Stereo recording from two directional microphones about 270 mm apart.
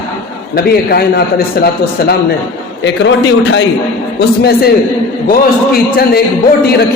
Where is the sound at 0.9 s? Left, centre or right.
Left.